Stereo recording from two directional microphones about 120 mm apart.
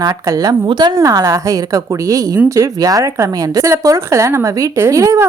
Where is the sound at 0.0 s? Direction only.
30° right (ahead or behind).